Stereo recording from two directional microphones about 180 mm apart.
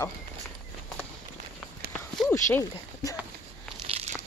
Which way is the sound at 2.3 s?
15° left (ahead or behind).